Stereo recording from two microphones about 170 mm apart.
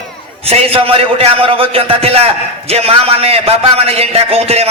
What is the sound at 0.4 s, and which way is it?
A man's voice, 35° right (ahead or behind).